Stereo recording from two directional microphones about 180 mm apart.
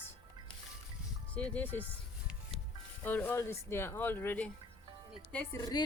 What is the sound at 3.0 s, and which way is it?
Speech, 10° left (ahead or behind).